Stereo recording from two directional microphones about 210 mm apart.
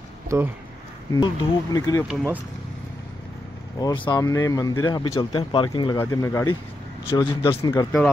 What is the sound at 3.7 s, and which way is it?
Speech, 20° left (ahead or behind).